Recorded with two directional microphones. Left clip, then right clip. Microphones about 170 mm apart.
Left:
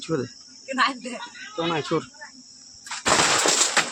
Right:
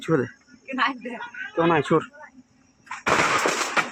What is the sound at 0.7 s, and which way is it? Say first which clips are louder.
Speech: left 2 dB; 35° left (ahead or behind).